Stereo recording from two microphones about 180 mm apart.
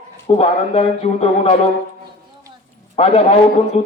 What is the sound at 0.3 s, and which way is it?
A man's voice, 35° left (ahead or behind).